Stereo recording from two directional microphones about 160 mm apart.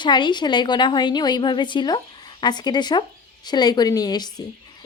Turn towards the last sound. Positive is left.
turn(degrees=25)  # may be behind; listen again after turning